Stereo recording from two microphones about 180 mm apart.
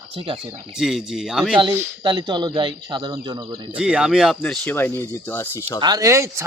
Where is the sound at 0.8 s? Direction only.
Centre (ahead or behind).